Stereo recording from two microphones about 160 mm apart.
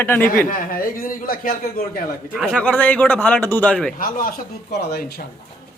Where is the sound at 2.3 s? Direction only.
5° left (ahead or behind).